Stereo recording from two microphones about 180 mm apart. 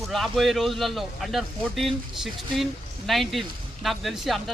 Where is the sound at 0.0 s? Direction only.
Centre (ahead or behind).